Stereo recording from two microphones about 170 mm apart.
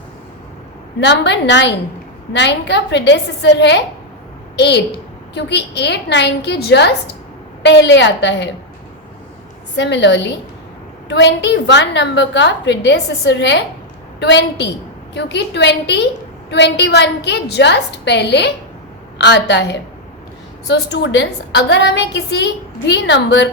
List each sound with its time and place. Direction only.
0.9 s a woman's voice: 90° left
7.6 s a woman's voice: 90° left
9.7 s a woman's voice: 90° left